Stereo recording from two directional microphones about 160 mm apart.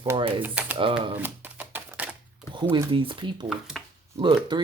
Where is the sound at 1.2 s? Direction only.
15° right (ahead or behind).